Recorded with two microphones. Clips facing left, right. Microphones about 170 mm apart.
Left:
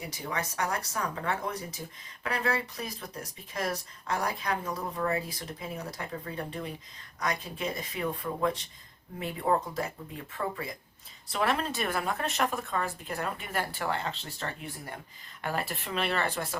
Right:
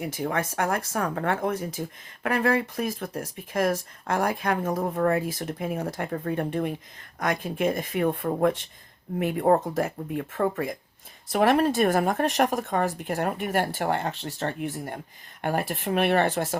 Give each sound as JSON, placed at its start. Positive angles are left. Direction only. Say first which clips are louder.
{"t": 0.0, "sound": "speech", "louder": "right 7 dB", "side_deg": -50}
{"t": 11.7, "sound": "speech", "louder": "right 9 dB", "side_deg": -45}
{"t": 12.9, "sound": "speech", "louder": "right 7 dB", "side_deg": -70}